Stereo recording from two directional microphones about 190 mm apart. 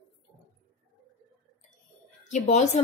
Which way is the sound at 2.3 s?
35° left (ahead or behind).